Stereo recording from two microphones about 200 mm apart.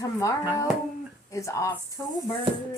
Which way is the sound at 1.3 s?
15° left (ahead or behind).